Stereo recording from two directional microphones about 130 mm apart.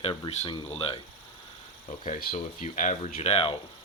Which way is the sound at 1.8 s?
70° left (ahead or behind).